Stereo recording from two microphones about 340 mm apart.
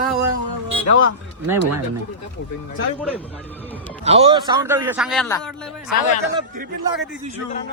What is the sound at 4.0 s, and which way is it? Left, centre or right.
A man's voice, centre.